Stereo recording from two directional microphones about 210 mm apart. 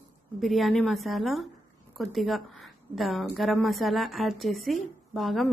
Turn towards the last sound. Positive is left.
turn(degrees=0)  # may be behind; listen again after turning